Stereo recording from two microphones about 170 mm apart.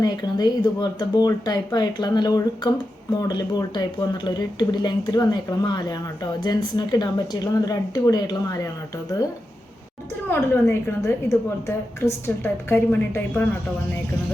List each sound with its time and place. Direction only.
0.0 s speech: 25° left (ahead or behind)
10.2 s a woman's voice: 15° left (ahead or behind)